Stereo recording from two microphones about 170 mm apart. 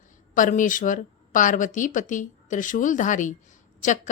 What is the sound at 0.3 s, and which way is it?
A woman's voice, 50° left (ahead or behind).